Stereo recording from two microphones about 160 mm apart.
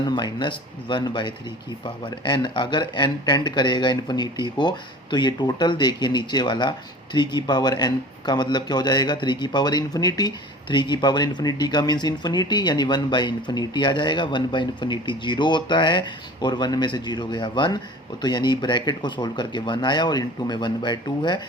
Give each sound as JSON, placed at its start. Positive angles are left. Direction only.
{"t": 0.2, "sound": "speech", "side_deg": 30}